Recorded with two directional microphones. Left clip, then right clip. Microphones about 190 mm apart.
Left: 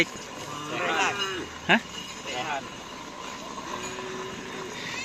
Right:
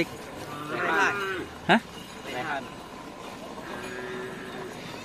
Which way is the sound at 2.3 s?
35° right (ahead or behind).